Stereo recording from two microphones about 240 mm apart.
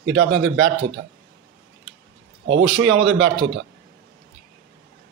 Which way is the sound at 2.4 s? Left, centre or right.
Right.